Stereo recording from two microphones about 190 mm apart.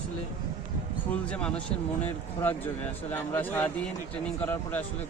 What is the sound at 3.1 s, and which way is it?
Speech, 10° left (ahead or behind).